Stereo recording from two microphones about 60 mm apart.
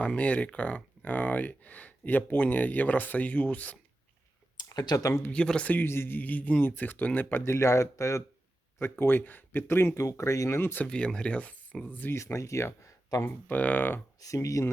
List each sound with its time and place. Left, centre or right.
0.2 s speech: left
4.7 s speech: left
5.3 s speech: centre
5.7 s speech: left
8.8 s speech: left
10.0 s speech: left
10.6 s speech: left
10.8 s speech: centre
12.1 s speech: left
13.2 s speech: left
14.2 s speech: left